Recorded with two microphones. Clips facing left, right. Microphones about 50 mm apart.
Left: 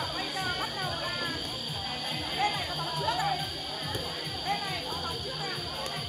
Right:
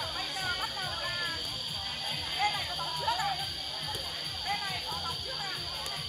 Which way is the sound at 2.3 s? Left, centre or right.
Centre.